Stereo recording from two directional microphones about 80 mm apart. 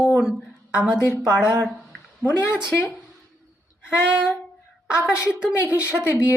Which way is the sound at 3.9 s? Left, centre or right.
Centre.